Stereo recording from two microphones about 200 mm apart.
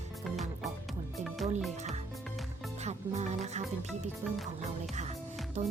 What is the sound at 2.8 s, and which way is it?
Speech, 35° right (ahead or behind).